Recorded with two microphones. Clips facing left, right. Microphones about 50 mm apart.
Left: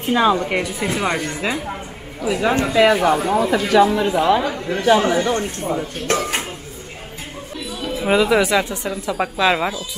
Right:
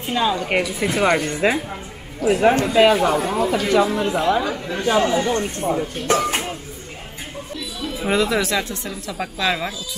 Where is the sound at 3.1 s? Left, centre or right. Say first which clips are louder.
Left 3 dB; centre.